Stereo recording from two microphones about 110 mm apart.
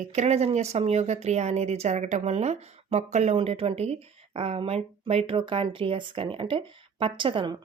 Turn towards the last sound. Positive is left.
turn(degrees=-50)  # may be behind; listen again after turning